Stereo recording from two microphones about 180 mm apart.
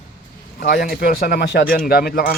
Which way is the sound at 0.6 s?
55° left (ahead or behind).